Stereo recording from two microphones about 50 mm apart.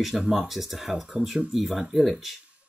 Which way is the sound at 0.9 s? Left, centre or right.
Right.